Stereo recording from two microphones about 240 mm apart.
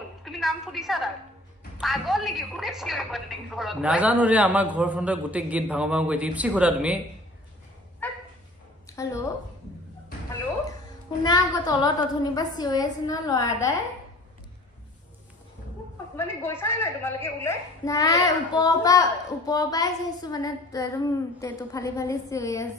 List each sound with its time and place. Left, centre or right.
0.2 s a woman's voice: centre
8.0 s dog: centre
8.8 s a woman's voice: centre
11.2 s a woman's voice: centre
16.2 s a woman's voice: centre